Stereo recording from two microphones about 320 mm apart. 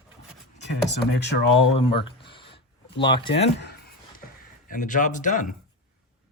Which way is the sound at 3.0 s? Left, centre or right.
Centre.